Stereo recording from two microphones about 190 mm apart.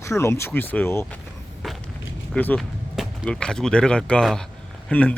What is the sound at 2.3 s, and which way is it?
Speech, 5° left (ahead or behind).